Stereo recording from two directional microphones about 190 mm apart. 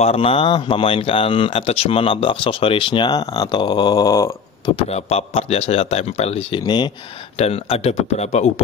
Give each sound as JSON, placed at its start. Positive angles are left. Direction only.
{"t": 0.0, "sound": "speech", "side_deg": 30}
{"t": 4.7, "sound": "speech", "side_deg": 35}